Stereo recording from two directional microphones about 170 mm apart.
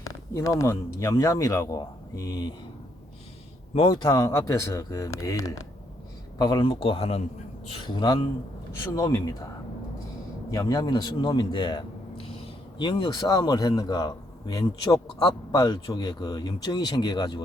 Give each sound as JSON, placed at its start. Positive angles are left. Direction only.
{"t": 0.0, "sound": "a man's voice", "side_deg": 20}
{"t": 3.8, "sound": "a man's voice", "side_deg": 25}
{"t": 10.5, "sound": "a man's voice", "side_deg": 20}